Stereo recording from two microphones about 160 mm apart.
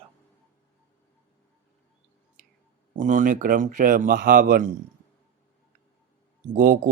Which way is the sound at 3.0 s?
50° right (ahead or behind).